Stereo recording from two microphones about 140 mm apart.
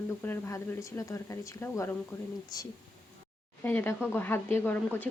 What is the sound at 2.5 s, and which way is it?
Speech, 25° left (ahead or behind).